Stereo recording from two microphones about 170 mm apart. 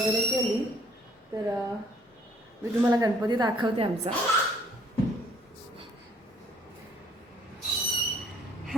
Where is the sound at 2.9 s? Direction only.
25° right (ahead or behind).